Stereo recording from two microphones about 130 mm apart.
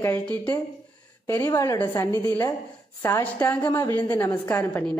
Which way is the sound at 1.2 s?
20° left (ahead or behind).